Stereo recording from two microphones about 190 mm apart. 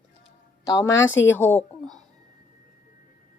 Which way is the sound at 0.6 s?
15° left (ahead or behind).